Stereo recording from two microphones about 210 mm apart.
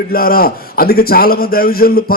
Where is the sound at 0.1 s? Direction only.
45° left (ahead or behind).